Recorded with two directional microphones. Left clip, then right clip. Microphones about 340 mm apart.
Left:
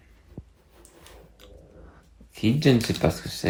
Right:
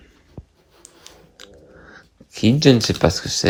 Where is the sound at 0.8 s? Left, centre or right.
Right.